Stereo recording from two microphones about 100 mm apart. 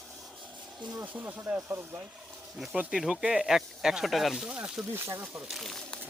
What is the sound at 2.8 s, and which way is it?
Speech, 5° right (ahead or behind).